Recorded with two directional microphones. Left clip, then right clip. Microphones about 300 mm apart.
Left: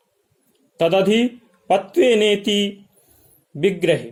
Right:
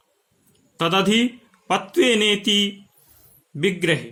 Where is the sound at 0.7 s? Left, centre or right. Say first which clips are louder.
Left 3 dB; centre.